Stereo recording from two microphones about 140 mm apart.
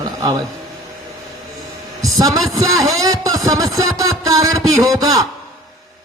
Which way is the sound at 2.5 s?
25° right (ahead or behind).